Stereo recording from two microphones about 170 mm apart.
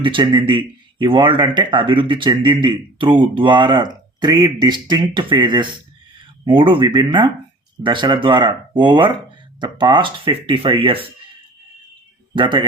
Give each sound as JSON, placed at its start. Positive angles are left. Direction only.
{"t": 0.0, "sound": "speech", "side_deg": -30}
{"t": 12.3, "sound": "speech", "side_deg": -30}